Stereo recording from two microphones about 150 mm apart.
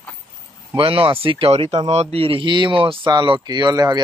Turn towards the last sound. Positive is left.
turn(degrees=-25)  # may be behind; listen again after turning